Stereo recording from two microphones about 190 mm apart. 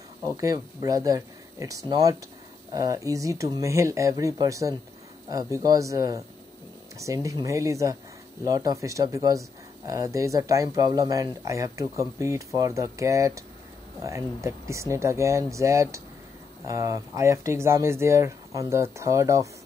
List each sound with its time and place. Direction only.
0.2 s speech: 20° right (ahead or behind)